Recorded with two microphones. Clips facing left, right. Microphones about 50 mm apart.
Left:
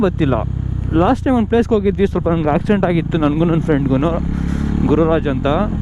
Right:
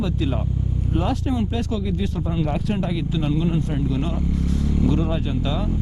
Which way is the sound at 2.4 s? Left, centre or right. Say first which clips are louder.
Left 9 dB; left.